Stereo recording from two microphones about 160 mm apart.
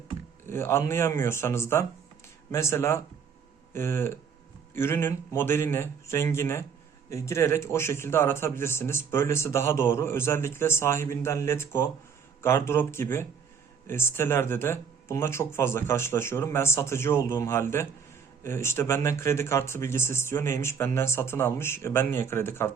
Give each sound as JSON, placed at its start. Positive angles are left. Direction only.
{"t": 0.5, "sound": "a man's voice", "side_deg": 15}